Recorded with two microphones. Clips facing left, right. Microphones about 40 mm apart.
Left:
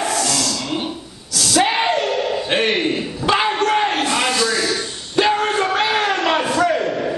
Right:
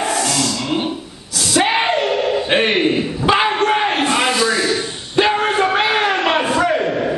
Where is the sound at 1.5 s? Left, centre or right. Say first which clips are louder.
Right 1 dB; centre.